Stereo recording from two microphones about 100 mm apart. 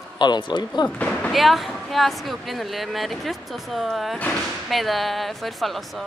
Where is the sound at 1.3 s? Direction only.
Centre (ahead or behind).